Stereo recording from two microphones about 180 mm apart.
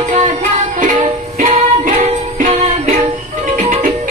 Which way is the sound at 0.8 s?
45° right (ahead or behind).